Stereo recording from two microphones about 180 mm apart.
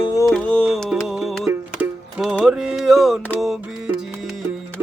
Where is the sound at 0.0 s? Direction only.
20° left (ahead or behind).